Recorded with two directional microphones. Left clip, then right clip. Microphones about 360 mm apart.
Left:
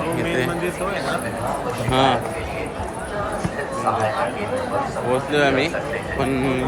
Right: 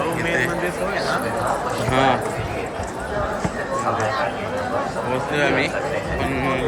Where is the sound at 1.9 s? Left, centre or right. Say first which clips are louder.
Even; centre.